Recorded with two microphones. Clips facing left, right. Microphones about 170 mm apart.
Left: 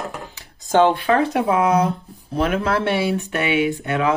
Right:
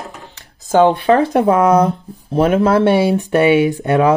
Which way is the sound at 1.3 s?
45° right (ahead or behind).